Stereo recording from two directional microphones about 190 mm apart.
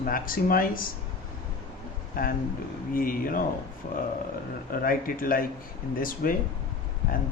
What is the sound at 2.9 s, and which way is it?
Speech, 50° left (ahead or behind).